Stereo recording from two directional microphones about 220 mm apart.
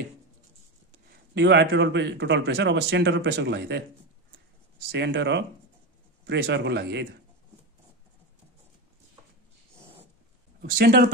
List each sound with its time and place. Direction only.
1.3 s speech: 50° right (ahead or behind)
4.9 s speech: 50° right (ahead or behind)
10.6 s speech: 45° right (ahead or behind)